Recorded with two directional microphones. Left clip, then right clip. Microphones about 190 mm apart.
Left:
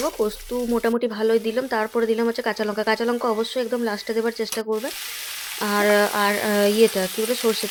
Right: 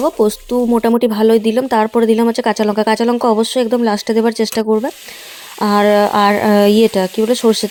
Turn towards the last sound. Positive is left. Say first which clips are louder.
# right 9 dB
turn(degrees=-35)  # may be behind; listen again after turning